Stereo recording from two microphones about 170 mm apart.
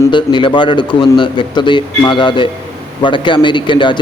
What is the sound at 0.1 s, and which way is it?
A man's voice, 30° left (ahead or behind).